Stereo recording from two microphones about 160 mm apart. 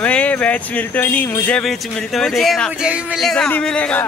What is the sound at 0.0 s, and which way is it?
Speech, 10° left (ahead or behind).